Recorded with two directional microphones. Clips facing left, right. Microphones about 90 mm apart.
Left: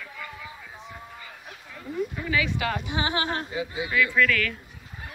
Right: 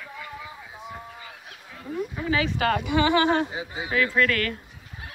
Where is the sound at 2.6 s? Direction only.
60° right (ahead or behind); by 3.5 s 80° right.